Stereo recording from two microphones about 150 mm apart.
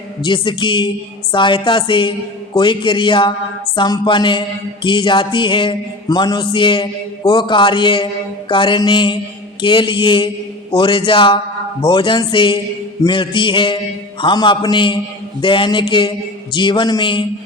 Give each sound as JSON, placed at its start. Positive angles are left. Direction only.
{"t": 0.3, "sound": "music", "side_deg": 35}